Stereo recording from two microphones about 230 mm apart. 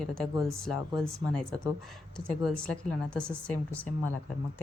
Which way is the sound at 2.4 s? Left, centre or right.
Centre.